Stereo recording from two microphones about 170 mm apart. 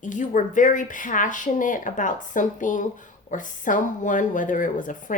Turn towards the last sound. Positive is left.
turn(degrees=50)  # may be behind; listen again after turning